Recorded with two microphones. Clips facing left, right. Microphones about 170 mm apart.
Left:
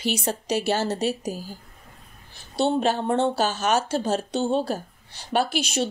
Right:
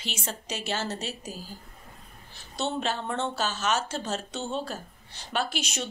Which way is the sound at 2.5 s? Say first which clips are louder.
Left 8 dB; 35° left (ahead or behind).